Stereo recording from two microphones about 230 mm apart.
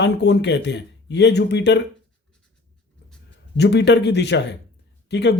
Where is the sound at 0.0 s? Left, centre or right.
Left.